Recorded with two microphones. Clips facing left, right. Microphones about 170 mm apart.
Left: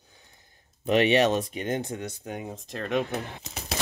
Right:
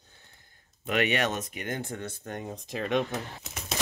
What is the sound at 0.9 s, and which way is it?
Speech, 25° left (ahead or behind).